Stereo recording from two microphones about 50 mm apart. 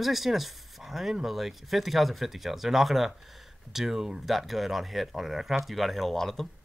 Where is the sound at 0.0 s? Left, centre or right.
Centre.